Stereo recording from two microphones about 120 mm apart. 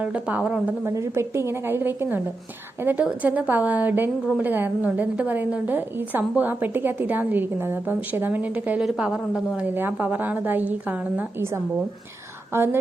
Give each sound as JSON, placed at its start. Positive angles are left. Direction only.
{"t": 0.0, "sound": "a woman's voice", "side_deg": -10}
{"t": 0.9, "sound": "a woman's voice", "side_deg": -25}